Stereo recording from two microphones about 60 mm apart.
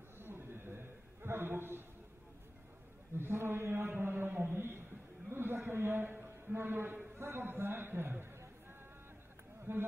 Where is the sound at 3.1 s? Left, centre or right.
Right.